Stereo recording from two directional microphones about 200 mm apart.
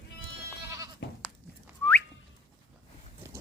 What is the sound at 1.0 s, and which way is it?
Goat, 60° left (ahead or behind).